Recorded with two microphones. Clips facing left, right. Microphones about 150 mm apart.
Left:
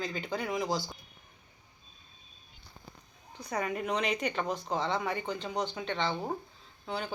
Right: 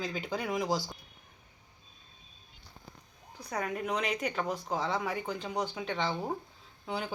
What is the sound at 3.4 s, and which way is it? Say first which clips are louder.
Speech: left 1 dB; centre (ahead or behind).